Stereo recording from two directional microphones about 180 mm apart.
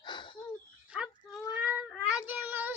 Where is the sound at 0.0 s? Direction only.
25° left (ahead or behind).